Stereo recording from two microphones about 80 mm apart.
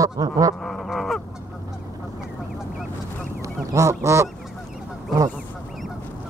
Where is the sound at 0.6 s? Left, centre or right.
Centre.